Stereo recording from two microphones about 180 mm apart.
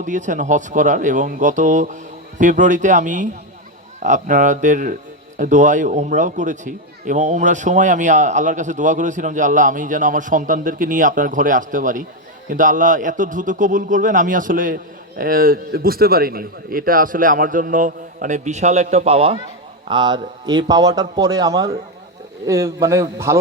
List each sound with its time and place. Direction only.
0.0 s a man's voice: 45° right (ahead or behind); by 23.4 s 15° right (ahead or behind)